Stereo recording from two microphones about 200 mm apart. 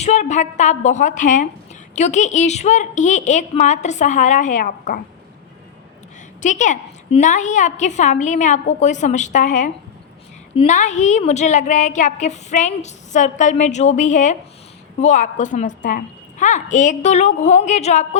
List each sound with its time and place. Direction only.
0.0 s a woman's voice: 35° left (ahead or behind)
6.4 s a woman's voice: 35° left (ahead or behind)